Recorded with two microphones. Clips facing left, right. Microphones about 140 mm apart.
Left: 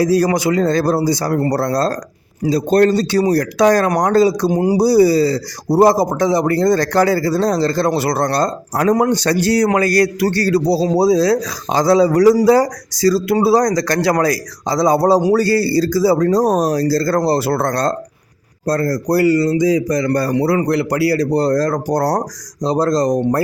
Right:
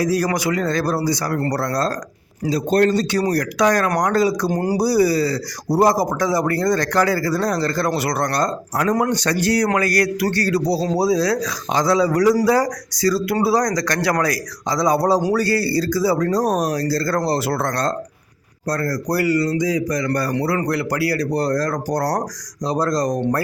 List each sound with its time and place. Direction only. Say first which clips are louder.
0.0 s a man's voice: left 5 dB; 30° left (ahead or behind)
4.5 s speech: left 5 dB; 15° left (ahead or behind)
4.8 s a man's voice: left 5 dB; 25° left (ahead or behind)